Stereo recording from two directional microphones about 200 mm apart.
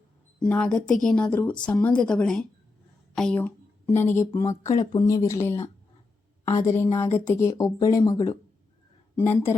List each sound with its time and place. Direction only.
0.3 s a woman's voice: 5° left (ahead or behind)